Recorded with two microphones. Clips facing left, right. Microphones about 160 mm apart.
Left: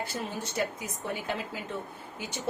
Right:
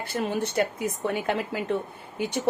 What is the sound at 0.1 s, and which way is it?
A woman's voice, 60° right (ahead or behind).